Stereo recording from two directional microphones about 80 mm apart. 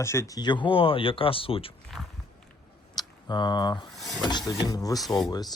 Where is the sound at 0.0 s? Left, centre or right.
Left.